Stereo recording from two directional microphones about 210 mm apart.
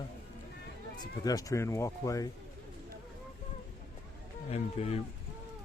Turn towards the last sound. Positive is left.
turn(degrees=30)  # may be behind; listen again after turning